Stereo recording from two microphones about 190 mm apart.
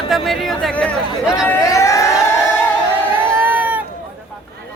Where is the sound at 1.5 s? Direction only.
15° left (ahead or behind).